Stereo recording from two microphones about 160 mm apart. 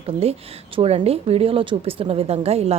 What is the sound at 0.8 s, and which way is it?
A woman's voice, 40° right (ahead or behind).